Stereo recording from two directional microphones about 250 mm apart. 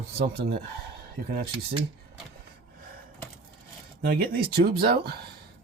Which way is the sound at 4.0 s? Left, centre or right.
Right.